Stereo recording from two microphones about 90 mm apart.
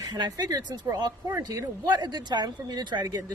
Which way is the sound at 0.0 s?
45° right (ahead or behind).